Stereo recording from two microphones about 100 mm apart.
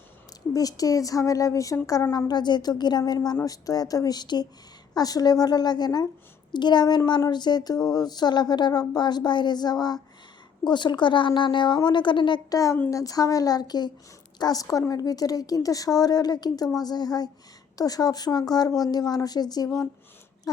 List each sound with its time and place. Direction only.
0.5 s a woman's voice: 35° left (ahead or behind); by 12.4 s 50° left (ahead or behind)
12.5 s a woman's voice: 35° left (ahead or behind)